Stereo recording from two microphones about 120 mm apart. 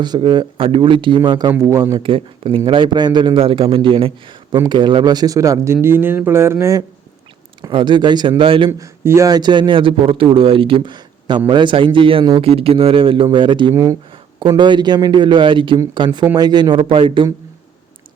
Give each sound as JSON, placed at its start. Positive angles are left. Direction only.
{"t": 0.0, "sound": "speech", "side_deg": -40}
{"t": 2.0, "sound": "a man's voice", "side_deg": -45}
{"t": 7.7, "sound": "a man's voice", "side_deg": -40}
{"t": 8.8, "sound": "a man's voice", "side_deg": -25}
{"t": 16.1, "sound": "speech", "side_deg": -30}